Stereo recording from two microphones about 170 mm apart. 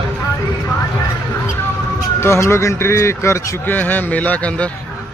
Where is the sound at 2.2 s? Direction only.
15° left (ahead or behind).